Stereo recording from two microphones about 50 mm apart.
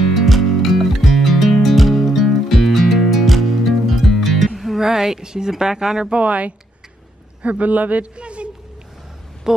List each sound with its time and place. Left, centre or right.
0.1 s music: centre
4.6 s speech: centre
6.2 s a man's voice: right